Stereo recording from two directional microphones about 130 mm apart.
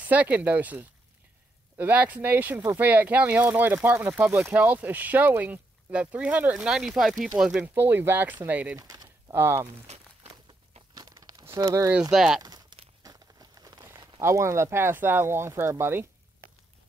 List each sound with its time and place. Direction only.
0.0 s speech: 10° right (ahead or behind)
7.7 s speech: 15° right (ahead or behind)
8.7 s speech: 30° right (ahead or behind)
11.0 s crumpling: 25° right (ahead or behind)
12.1 s speech: 5° right (ahead or behind)
12.4 s crumpling: 30° right (ahead or behind)
14.2 s speech: 20° right (ahead or behind)